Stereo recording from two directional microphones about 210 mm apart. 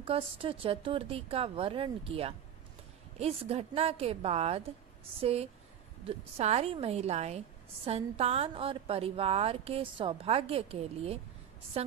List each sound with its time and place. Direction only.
0.0 s a woman's voice: 25° right (ahead or behind)